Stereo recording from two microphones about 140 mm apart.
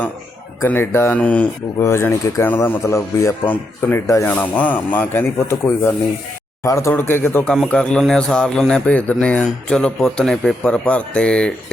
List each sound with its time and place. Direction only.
0.6 s a man's voice: 15° left (ahead or behind)